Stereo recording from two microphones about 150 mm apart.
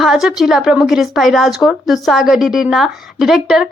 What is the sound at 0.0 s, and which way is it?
A woman's voice, 5° right (ahead or behind).